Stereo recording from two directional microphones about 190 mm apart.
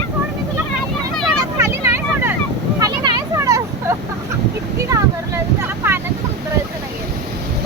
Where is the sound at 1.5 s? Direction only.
15° right (ahead or behind).